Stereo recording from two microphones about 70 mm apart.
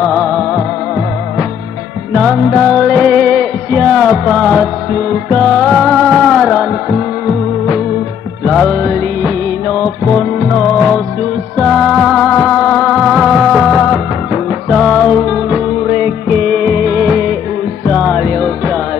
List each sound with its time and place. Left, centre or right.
0.0 s music: centre
2.6 s music: centre
8.5 s music: centre
10.1 s music: centre
12.3 s music: centre
12.8 s music: centre
16.6 s music: centre